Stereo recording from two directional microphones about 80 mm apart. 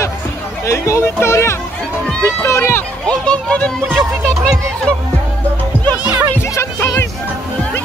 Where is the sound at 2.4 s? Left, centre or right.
Left.